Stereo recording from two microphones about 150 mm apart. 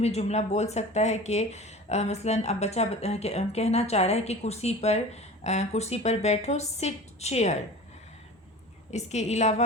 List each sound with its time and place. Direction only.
0.0 s speech: 45° left (ahead or behind)
8.9 s speech: 50° left (ahead or behind)